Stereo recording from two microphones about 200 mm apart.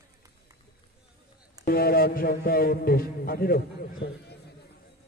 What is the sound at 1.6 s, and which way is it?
A man's voice, 50° left (ahead or behind).